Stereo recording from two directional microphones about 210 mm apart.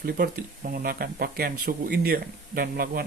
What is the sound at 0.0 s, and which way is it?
Speech, 45° right (ahead or behind).